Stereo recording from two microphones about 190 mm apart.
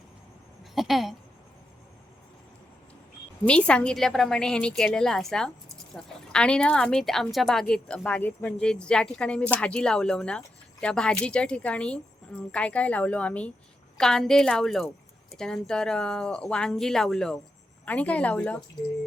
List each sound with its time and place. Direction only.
0.8 s speech: centre (ahead or behind)
3.4 s a woman's voice: 5° left (ahead or behind)